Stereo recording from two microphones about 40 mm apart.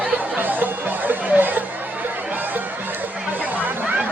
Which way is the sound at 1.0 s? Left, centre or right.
Right.